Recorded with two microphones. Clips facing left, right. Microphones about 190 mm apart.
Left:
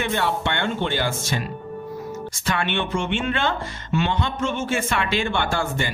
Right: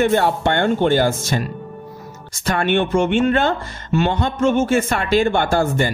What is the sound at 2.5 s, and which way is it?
Speech, 45° right (ahead or behind).